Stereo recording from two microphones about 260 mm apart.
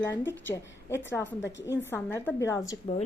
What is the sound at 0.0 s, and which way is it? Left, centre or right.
Speech, centre.